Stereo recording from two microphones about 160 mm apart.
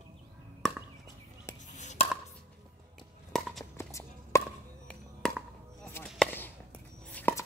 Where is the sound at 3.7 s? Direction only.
15° left (ahead or behind).